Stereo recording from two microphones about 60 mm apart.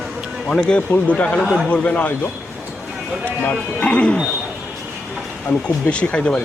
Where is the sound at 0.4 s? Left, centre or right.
Centre.